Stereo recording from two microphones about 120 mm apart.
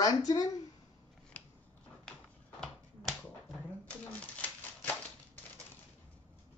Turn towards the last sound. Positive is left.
turn(degrees=10)  # may be behind; listen again after turning